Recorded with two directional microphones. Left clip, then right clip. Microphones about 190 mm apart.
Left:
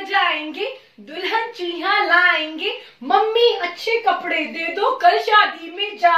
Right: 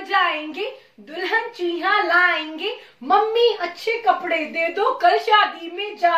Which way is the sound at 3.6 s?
15° right (ahead or behind).